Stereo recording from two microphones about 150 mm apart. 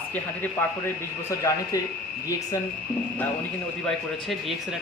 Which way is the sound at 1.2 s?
20° left (ahead or behind).